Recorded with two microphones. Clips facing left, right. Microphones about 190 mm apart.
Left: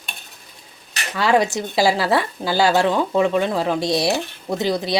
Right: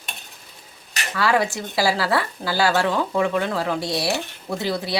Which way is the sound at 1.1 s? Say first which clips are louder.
Left 3 dB; 20° left (ahead or behind).